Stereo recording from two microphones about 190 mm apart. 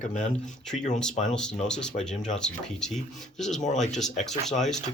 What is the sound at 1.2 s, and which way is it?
Speech, 5° left (ahead or behind).